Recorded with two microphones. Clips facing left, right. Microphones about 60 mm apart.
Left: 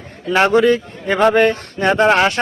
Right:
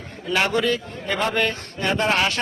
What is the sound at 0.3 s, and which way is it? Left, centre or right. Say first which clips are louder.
A man's voice: left 9 dB; left.